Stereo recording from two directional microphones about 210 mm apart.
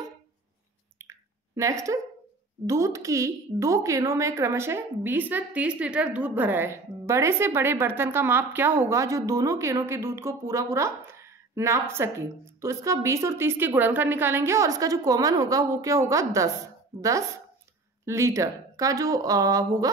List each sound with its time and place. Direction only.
0.9 s squish: 15° right (ahead or behind)
2.6 s a woman's voice: 15° right (ahead or behind)
18.0 s a woman's voice: 15° right (ahead or behind)